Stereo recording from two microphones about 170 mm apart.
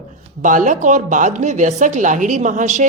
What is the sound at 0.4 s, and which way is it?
A woman's voice, 50° right (ahead or behind).